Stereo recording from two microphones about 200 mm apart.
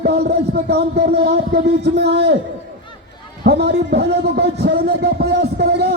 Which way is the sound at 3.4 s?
55° right (ahead or behind).